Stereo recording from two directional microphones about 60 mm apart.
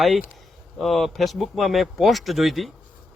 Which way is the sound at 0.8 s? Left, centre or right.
Centre.